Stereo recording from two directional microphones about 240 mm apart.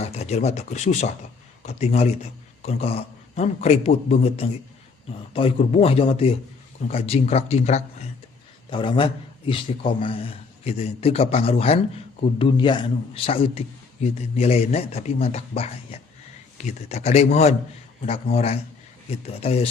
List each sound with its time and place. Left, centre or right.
0.0 s a man's voice: left